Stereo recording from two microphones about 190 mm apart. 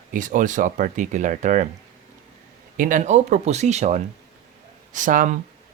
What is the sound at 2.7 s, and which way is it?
Speech, 45° right (ahead or behind).